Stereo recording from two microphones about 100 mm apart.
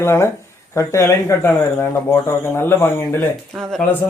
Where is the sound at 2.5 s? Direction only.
25° left (ahead or behind).